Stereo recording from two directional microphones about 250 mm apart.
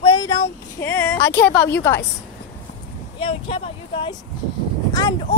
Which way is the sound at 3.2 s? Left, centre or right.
Left.